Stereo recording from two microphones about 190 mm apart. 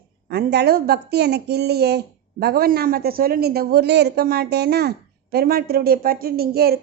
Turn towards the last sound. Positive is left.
turn(degrees=-55)  # may be behind; listen again after turning